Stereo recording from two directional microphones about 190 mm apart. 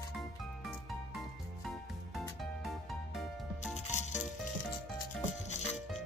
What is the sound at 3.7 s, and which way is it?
Music, 40° left (ahead or behind).